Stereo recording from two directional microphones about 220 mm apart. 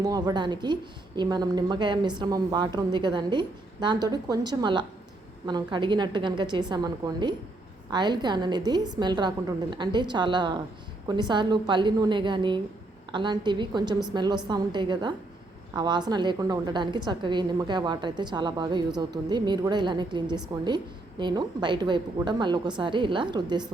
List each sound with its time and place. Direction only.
0.0 s a woman's voice: 15° right (ahead or behind)